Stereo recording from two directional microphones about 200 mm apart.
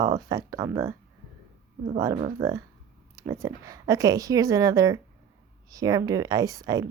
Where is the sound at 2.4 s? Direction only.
15° right (ahead or behind).